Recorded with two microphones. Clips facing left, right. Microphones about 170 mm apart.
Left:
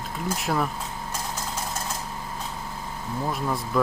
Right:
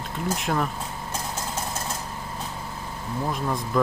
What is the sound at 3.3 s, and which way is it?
Speech, centre (ahead or behind).